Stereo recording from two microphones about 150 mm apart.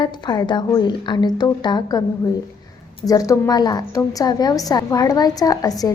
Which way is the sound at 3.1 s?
20° left (ahead or behind).